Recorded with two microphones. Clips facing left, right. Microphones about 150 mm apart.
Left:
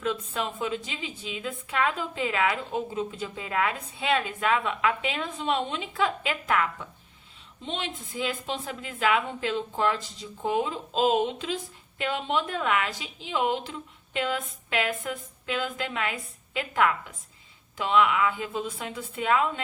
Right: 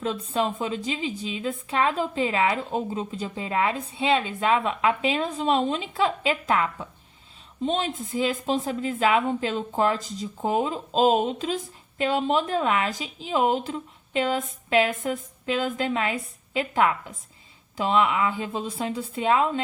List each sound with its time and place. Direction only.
0.0 s a woman's voice: 35° right (ahead or behind)